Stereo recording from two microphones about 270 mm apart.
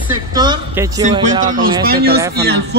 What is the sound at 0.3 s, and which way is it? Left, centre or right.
Music, centre.